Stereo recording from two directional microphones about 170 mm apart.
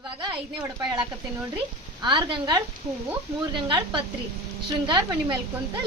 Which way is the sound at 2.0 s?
30° right (ahead or behind).